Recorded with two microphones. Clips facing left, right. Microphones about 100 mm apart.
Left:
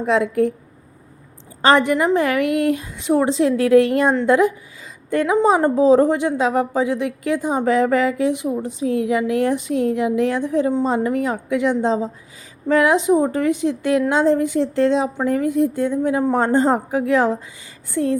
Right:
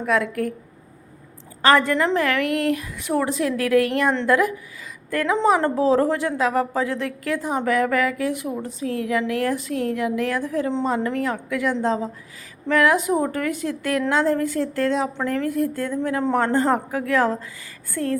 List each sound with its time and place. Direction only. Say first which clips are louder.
0.0 s a woman's voice: left 5 dB; 25° left (ahead or behind)
1.6 s a woman's voice: left 2 dB; 20° left (ahead or behind)